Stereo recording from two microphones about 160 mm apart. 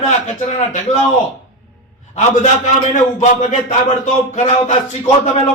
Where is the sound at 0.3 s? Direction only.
50° left (ahead or behind).